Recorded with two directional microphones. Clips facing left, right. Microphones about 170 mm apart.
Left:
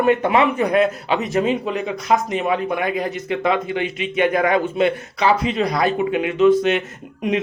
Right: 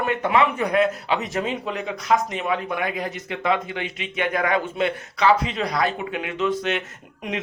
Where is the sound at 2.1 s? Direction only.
15° left (ahead or behind).